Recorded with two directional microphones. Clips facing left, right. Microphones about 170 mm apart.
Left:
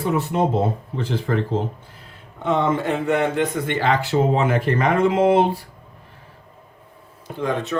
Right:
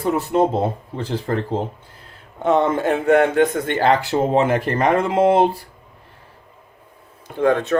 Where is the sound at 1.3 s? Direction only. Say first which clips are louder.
Even; 40° right (ahead or behind).